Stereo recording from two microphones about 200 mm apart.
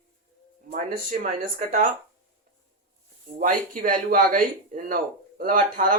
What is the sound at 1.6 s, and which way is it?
Speech, 40° right (ahead or behind).